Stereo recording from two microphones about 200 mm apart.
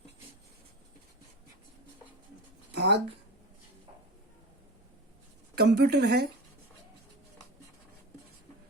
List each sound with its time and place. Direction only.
2.7 s speech: 55° right (ahead or behind)
5.5 s a woman's voice: 55° right (ahead or behind)